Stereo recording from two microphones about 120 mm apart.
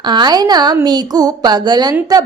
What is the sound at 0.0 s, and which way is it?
Speech, 35° right (ahead or behind).